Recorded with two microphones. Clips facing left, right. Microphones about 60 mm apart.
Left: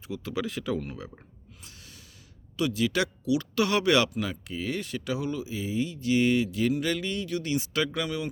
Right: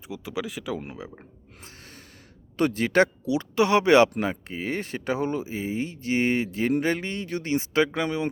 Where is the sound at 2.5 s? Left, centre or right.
Right.